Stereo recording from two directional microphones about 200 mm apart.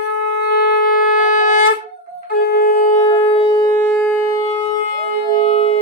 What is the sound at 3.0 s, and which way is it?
Siren, 20° left (ahead or behind).